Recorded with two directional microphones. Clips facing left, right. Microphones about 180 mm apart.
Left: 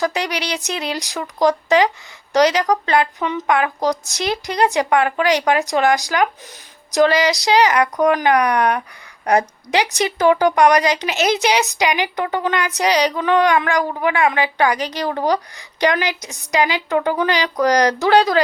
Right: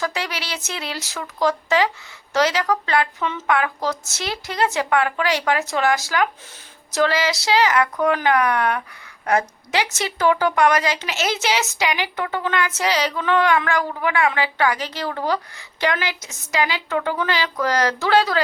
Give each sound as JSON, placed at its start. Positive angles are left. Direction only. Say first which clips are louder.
{"t": 0.0, "sound": "a woman's voice", "louder": "left 5 dB", "side_deg": 15}